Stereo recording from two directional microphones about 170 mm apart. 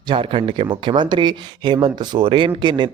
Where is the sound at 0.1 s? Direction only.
35° right (ahead or behind).